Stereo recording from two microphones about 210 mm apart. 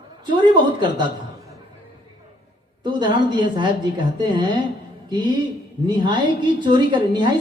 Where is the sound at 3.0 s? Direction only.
20° right (ahead or behind).